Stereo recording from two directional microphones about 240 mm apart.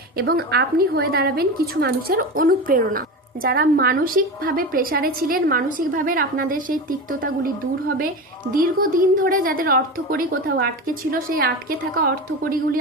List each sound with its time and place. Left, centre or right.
0.2 s a woman's voice: right
8.5 s a woman's voice: right